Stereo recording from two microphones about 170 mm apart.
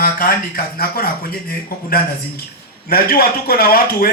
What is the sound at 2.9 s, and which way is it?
Speech, 60° left (ahead or behind).